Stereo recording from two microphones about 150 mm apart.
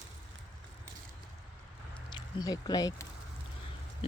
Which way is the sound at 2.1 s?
25° left (ahead or behind).